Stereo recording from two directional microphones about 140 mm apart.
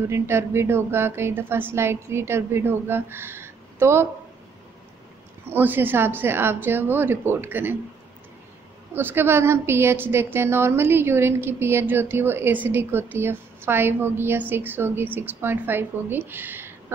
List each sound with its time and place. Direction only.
0.1 s a woman's voice: 15° right (ahead or behind)
5.5 s a woman's voice: 15° right (ahead or behind)
8.9 s a woman's voice: 15° right (ahead or behind)